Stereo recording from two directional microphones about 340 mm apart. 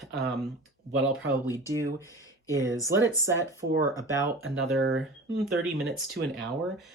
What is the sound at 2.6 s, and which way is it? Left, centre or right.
Speech, centre.